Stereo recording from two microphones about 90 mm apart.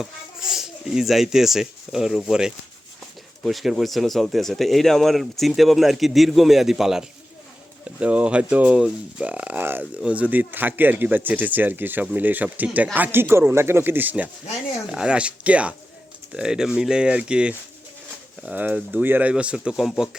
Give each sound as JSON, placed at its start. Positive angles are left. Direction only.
{"t": 0.0, "sound": "speech", "side_deg": -5}